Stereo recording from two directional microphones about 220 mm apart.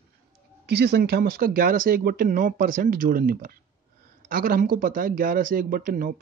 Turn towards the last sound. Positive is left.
turn(degrees=-40)  # may be behind; listen again after turning